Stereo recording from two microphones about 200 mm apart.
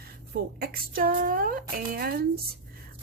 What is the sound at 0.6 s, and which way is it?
Speech, 50° right (ahead or behind).